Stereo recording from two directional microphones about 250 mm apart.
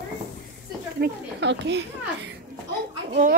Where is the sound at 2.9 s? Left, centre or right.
Right.